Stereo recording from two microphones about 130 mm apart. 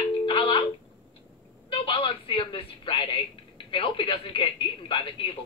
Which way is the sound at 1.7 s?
45° left (ahead or behind).